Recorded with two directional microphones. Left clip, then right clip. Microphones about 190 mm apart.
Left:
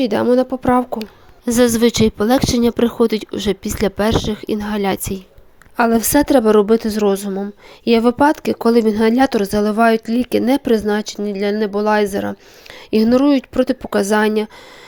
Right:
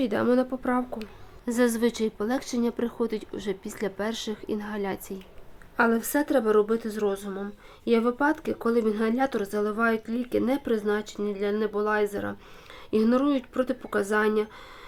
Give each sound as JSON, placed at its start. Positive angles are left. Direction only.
{"t": 0.0, "sound": "a woman's voice", "side_deg": 35}